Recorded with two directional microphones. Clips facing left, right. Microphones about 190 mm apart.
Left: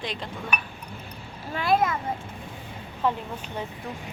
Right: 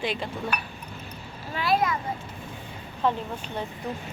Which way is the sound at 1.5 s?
50° left (ahead or behind).